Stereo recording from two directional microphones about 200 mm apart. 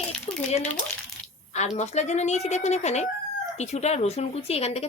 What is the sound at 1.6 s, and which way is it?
Speech, 35° left (ahead or behind).